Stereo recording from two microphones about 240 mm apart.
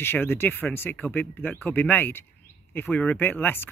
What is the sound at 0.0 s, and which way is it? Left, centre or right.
Speech, centre.